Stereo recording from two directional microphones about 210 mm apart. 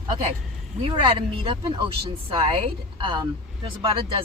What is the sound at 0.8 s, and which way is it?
Speech, 20° right (ahead or behind).